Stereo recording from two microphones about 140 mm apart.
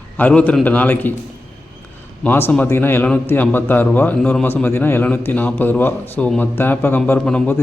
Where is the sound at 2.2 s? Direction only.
15° left (ahead or behind).